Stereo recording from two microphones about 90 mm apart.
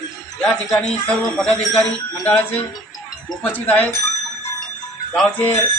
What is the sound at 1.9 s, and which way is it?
Speech, 20° left (ahead or behind).